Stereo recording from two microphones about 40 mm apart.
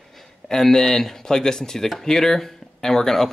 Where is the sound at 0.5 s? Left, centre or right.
Centre.